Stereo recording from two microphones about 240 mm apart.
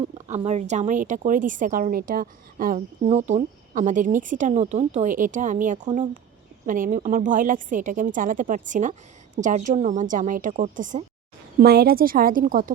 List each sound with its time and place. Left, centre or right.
0.0 s speech: right